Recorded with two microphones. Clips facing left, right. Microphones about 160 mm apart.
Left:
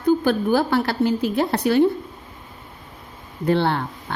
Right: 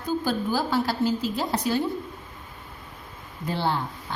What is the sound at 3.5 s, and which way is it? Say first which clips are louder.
Speech: left 7 dB; 65° left (ahead or behind).